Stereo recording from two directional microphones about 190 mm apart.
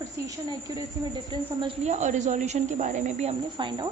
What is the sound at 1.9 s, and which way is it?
A woman's voice, 40° right (ahead or behind).